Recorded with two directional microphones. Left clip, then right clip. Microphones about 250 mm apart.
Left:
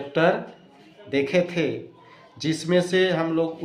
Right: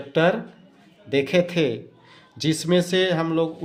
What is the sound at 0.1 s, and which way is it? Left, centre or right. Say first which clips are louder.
A man's voice: right 1 dB; right.